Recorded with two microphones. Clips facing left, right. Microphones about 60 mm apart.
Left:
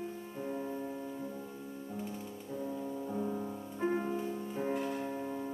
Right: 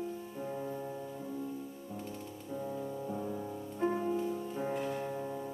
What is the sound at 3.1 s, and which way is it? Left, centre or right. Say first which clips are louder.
Music: left 1 dB; centre.